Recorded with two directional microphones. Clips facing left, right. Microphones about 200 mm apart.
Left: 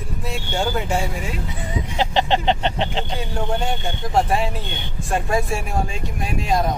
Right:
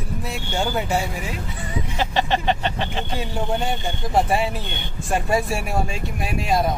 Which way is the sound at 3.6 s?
Centre (ahead or behind).